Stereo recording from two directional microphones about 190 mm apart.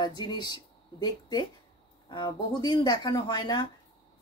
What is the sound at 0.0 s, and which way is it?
Speech, 25° left (ahead or behind).